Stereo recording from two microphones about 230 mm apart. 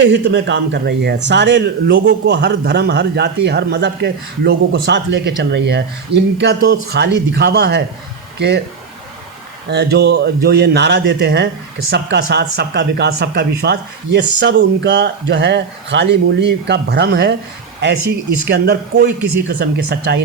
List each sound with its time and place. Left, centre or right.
0.0 s speech: right
9.6 s speech: right